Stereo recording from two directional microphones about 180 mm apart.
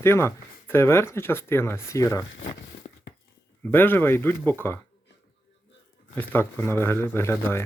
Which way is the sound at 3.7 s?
10° left (ahead or behind).